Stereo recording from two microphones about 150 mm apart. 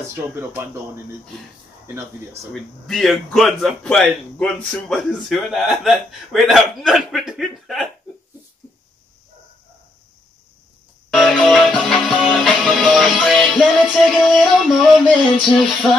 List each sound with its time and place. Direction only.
0.1 s speech: 15° right (ahead or behind)
2.5 s speech: centre (ahead or behind)
11.1 s music: centre (ahead or behind)